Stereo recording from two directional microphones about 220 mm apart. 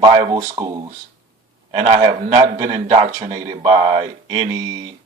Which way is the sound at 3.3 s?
20° right (ahead or behind).